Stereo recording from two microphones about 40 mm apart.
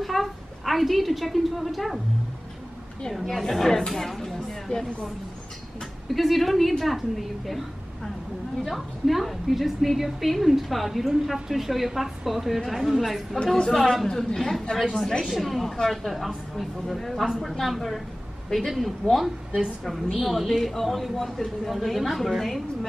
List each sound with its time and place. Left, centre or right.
0.0 s a woman's voice: centre
3.1 s a woman's voice: centre
6.1 s a woman's voice: centre
14.0 s a woman's voice: centre
16.1 s a woman's voice: centre